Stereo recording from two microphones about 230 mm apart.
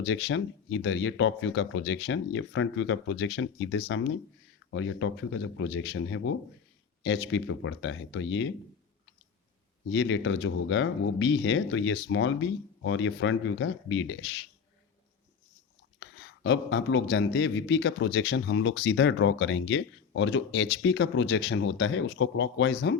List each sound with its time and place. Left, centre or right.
0.0 s a man's voice: left
9.9 s speech: left
16.0 s a man's voice: left